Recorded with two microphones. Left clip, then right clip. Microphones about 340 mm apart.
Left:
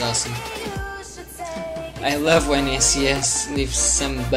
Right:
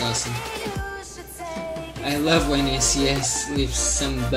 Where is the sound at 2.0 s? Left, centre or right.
Centre.